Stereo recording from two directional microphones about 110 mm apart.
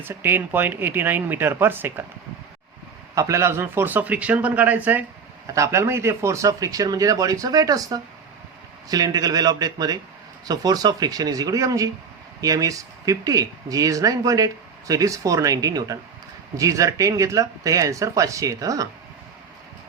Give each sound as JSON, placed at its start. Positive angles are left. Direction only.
{"t": 0.0, "sound": "speech", "side_deg": -20}
{"t": 3.2, "sound": "a man's voice", "side_deg": -25}
{"t": 5.5, "sound": "speech", "side_deg": -25}